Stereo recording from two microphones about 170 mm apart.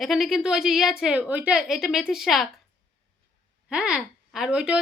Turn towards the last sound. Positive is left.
turn(degrees=-5)  # may be behind; listen again after turning